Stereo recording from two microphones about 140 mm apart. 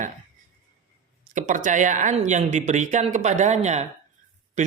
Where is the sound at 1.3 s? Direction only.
65° right (ahead or behind).